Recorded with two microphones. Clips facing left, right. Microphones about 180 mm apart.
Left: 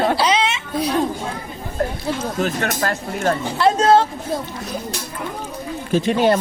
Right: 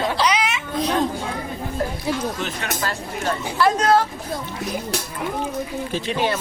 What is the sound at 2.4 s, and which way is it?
Speech, 45° left (ahead or behind).